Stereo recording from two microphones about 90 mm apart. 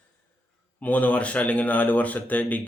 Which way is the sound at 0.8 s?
20° left (ahead or behind).